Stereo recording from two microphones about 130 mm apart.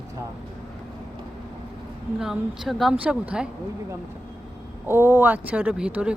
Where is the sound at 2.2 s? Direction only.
Centre (ahead or behind).